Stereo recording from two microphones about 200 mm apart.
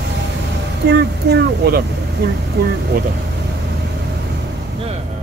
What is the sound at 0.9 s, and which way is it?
Speech, 55° right (ahead or behind).